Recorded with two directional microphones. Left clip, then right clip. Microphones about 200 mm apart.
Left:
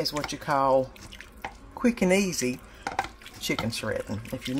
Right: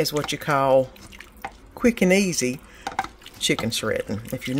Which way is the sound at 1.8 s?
30° right (ahead or behind).